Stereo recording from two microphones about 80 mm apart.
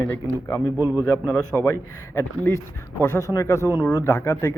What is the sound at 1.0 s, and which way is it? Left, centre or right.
Speech, left.